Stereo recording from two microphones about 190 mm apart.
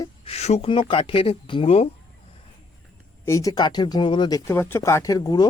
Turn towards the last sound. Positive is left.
turn(degrees=20)  # may be behind; listen again after turning